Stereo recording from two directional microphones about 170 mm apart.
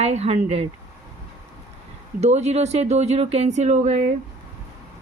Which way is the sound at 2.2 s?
40° right (ahead or behind).